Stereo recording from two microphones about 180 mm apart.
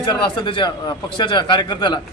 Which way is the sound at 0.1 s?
25° left (ahead or behind).